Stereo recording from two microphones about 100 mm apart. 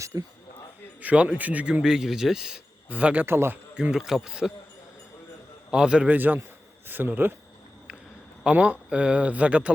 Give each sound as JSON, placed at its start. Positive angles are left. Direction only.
{"t": 0.0, "sound": "speech", "side_deg": -30}
{"t": 1.0, "sound": "a man's voice", "side_deg": -10}
{"t": 3.8, "sound": "a man's voice", "side_deg": -5}
{"t": 5.7, "sound": "a man's voice", "side_deg": -10}
{"t": 8.4, "sound": "a man's voice", "side_deg": -10}